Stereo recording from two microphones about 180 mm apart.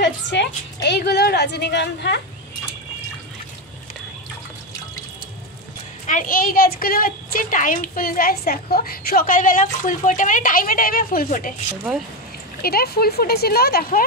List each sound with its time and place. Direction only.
0.0 s a woman's voice: 70° left (ahead or behind)
6.0 s a woman's voice: 50° left (ahead or behind)
12.6 s speech: 60° left (ahead or behind)